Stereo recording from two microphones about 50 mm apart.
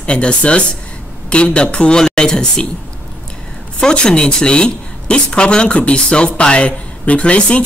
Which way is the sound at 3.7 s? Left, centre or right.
Centre.